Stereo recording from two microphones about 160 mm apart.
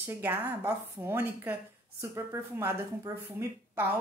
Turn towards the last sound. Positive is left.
turn(degrees=-10)  # may be behind; listen again after turning